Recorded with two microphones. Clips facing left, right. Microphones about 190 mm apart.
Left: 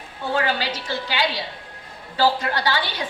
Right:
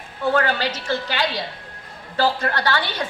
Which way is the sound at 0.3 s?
50° right (ahead or behind).